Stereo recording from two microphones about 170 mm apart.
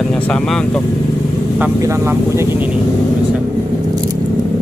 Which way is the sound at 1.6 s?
15° right (ahead or behind).